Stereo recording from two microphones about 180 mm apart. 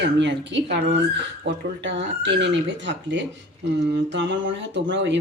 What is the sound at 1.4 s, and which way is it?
Speech, 85° right.